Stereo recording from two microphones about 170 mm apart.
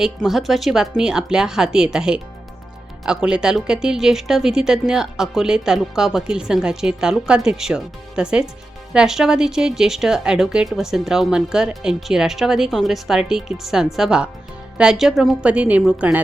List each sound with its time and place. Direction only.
0.0 s a woman's voice: centre (ahead or behind)